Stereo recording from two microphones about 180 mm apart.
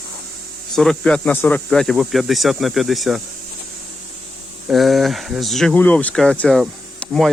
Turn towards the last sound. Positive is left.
turn(degrees=0)  # may be behind; listen again after turning